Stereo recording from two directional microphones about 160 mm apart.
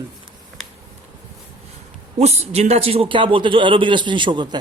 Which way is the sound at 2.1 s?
40° right (ahead or behind).